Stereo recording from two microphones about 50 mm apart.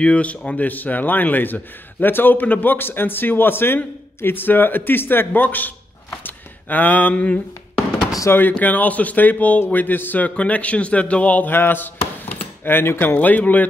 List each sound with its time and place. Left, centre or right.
0.0 s a man's voice: left
10.3 s a man's voice: left
11.5 s speech: left
13.0 s a man's voice: left